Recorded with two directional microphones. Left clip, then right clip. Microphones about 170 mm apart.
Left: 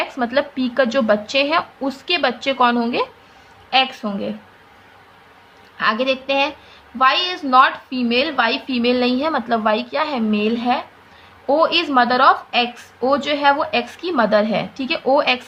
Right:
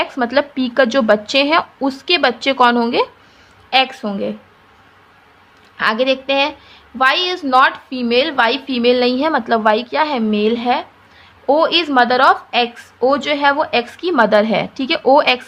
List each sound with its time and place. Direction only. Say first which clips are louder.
0.0 s a woman's voice: right 3 dB; 30° right (ahead or behind)
5.7 s a woman's voice: right 3 dB; 30° right (ahead or behind)